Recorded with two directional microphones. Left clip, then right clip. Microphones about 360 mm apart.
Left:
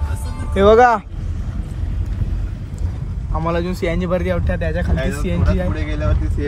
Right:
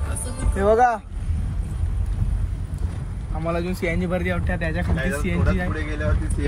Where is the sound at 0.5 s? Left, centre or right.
Left.